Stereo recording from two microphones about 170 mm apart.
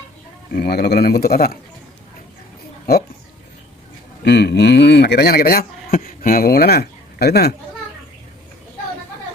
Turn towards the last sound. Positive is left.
turn(degrees=70)  # may be behind; listen again after turning